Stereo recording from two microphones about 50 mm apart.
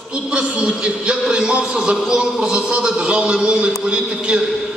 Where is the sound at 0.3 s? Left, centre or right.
Right.